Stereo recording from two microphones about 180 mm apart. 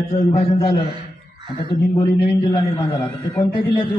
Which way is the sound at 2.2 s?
30° left (ahead or behind).